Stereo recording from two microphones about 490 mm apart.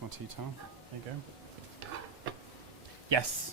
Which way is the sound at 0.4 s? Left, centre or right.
Right.